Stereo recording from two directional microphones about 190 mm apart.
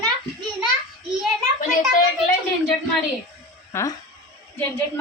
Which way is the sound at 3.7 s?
15° left (ahead or behind).